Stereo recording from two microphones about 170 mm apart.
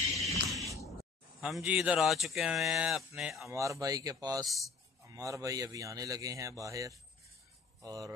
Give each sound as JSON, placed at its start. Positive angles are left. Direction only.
{"t": 0.3, "sound": "a sound", "side_deg": 0}
{"t": 1.4, "sound": "speech", "side_deg": -5}
{"t": 3.4, "sound": "a man's voice", "side_deg": -15}